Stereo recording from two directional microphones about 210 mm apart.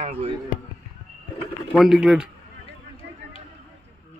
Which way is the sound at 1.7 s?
Centre (ahead or behind).